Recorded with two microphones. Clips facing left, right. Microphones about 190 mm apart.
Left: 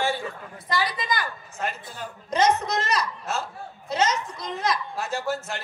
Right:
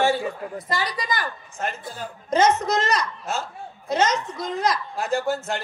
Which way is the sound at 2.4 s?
50° right (ahead or behind).